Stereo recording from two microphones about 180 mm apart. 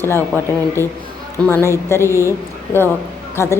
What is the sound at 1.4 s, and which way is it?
Speech, 15° left (ahead or behind).